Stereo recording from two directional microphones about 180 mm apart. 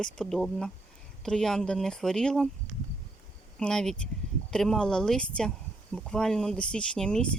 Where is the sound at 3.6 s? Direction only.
5° left (ahead or behind).